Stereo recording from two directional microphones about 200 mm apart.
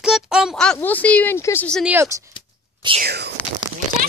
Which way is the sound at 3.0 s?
55° right (ahead or behind).